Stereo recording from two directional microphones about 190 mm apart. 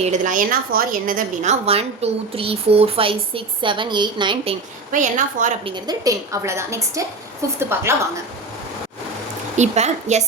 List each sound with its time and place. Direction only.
0.0 s a woman's voice: 40° right (ahead or behind); by 4.5 s 25° right (ahead or behind)
4.9 s a woman's voice: 40° right (ahead or behind)
5.6 s a woman's voice: 20° right (ahead or behind)
9.6 s a woman's voice: 35° right (ahead or behind)